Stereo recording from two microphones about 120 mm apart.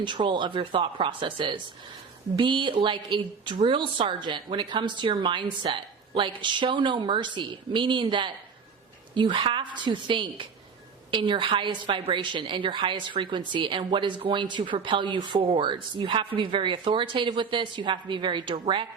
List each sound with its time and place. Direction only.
0.0 s a woman's voice: 40° right (ahead or behind)